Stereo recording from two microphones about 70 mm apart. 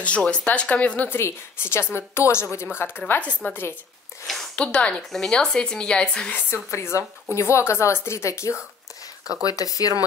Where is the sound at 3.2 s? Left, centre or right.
Left.